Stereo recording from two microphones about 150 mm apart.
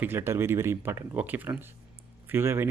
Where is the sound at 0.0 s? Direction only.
15° right (ahead or behind).